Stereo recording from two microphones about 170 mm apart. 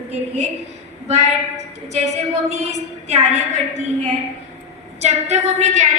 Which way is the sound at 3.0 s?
40° right (ahead or behind).